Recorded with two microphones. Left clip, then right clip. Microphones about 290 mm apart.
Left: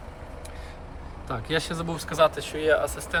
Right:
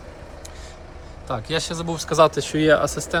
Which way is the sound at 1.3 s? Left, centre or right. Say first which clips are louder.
Right 3 dB; centre.